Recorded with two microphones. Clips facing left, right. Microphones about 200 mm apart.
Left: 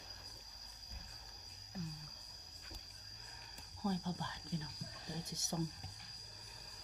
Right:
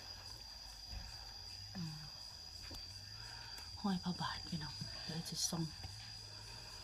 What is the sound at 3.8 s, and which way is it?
Speech, 15° left (ahead or behind).